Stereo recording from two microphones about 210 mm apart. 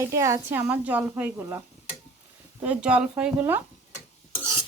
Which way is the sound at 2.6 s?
5° right (ahead or behind).